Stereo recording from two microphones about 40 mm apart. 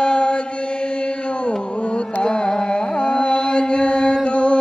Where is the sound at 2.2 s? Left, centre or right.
Left.